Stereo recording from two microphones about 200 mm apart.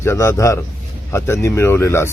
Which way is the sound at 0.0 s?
15° left (ahead or behind).